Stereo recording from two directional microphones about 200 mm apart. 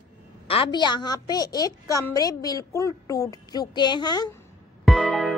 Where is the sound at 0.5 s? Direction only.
25° left (ahead or behind).